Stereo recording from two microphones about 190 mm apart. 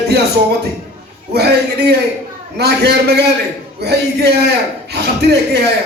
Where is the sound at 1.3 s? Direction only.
60° right (ahead or behind).